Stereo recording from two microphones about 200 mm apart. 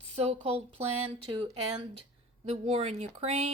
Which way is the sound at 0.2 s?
30° right (ahead or behind).